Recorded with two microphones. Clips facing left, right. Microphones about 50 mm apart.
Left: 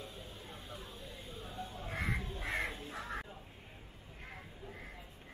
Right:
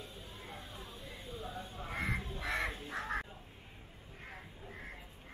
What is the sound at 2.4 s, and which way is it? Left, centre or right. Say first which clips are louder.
Crow: right 2 dB; right.